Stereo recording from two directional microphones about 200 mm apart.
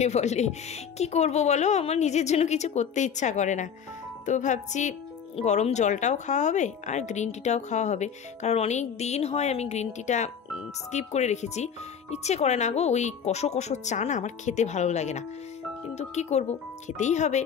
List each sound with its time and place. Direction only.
0.0 s speech: 35° left (ahead or behind)